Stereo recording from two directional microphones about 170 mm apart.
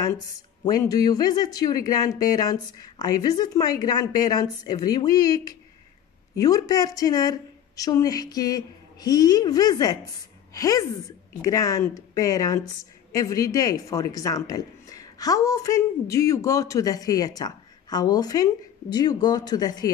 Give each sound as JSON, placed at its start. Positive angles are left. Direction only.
{"t": 0.7, "sound": "speech", "side_deg": 20}